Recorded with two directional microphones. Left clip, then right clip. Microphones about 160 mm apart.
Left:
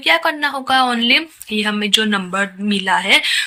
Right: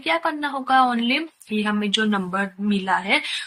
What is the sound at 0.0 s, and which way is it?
A woman's voice, 15° left (ahead or behind).